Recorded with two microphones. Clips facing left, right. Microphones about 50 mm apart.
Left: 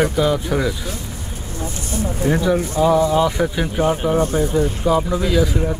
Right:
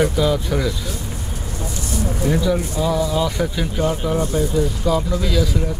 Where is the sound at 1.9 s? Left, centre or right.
Left.